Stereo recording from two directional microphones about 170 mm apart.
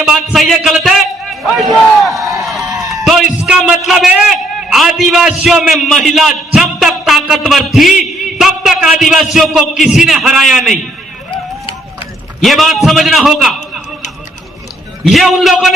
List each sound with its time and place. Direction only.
0.0 s a man's voice: centre (ahead or behind)
1.5 s crowd: centre (ahead or behind)
2.4 s a sound: centre (ahead or behind)
3.8 s a man's voice: 5° right (ahead or behind)
12.4 s a man's voice: centre (ahead or behind)
15.0 s a man's voice: centre (ahead or behind)